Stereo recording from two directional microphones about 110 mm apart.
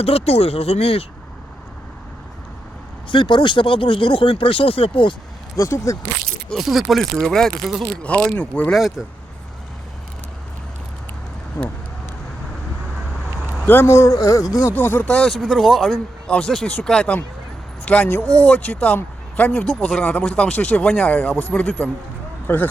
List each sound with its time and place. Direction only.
0.0 s speech: 65° left (ahead or behind)
3.1 s speech: 45° left (ahead or behind)
5.5 s speech: 30° left (ahead or behind)
6.2 s speech: centre (ahead or behind)
8.0 s speech: 10° left (ahead or behind)
8.7 s speech: centre (ahead or behind)
11.6 s speech: 25° left (ahead or behind)
13.7 s speech: 20° left (ahead or behind)
14.7 s speech: 15° left (ahead or behind)